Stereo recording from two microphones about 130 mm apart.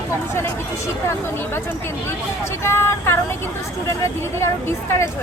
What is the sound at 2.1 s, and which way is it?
Speech, 20° left (ahead or behind).